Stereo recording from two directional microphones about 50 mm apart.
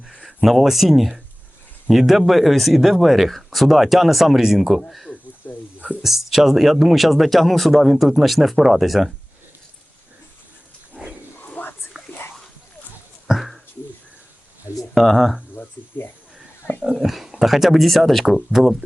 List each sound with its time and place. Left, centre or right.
0.4 s speech: centre
5.5 s speech: left
6.0 s speech: centre
11.6 s a sound: left
11.9 s whispering: centre
13.2 s a sound: centre
14.9 s speech: centre
15.5 s a sound: left
16.8 s speech: centre